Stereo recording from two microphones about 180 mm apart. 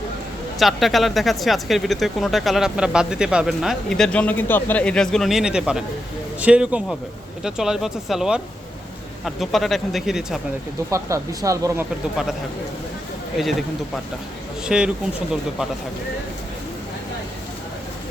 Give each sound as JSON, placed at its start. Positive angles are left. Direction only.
{"t": 0.6, "sound": "speech", "side_deg": 0}
{"t": 10.9, "sound": "speech", "side_deg": -15}
{"t": 13.3, "sound": "speech", "side_deg": 0}